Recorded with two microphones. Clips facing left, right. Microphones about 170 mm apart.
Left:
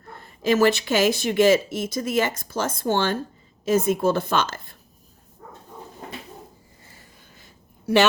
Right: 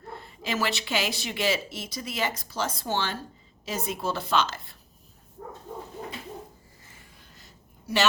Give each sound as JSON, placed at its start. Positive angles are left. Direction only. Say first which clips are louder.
{"t": 0.1, "sound": "speech", "louder": "left 11 dB", "side_deg": 50}